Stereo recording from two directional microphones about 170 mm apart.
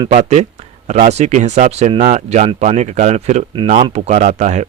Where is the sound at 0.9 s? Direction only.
40° right (ahead or behind).